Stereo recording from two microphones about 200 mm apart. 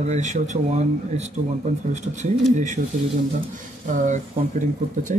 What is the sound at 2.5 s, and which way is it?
Speech, 35° right (ahead or behind).